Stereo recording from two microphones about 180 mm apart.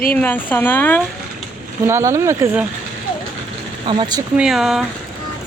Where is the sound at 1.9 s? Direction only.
15° right (ahead or behind).